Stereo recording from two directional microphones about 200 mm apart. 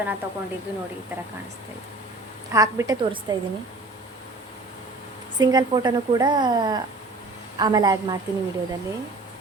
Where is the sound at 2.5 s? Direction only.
15° right (ahead or behind).